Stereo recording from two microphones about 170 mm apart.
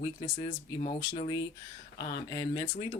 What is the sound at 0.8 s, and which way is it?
Speech, 45° left (ahead or behind).